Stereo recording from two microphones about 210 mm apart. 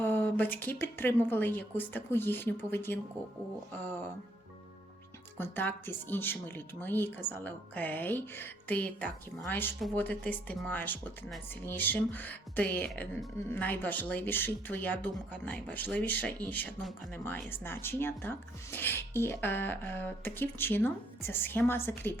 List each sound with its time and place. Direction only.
0.0 s speech: 10° left (ahead or behind)
5.4 s speech: 10° left (ahead or behind)